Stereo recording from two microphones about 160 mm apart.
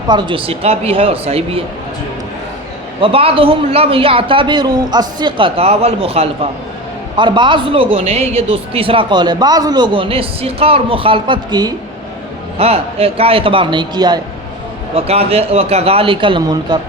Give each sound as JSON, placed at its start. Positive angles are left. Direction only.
{"t": 0.1, "sound": "speech", "side_deg": -30}
{"t": 3.0, "sound": "a man's voice", "side_deg": -35}
{"t": 14.9, "sound": "speech", "side_deg": -40}